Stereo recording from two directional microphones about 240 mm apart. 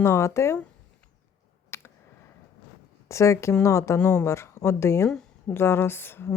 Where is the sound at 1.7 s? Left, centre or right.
Centre.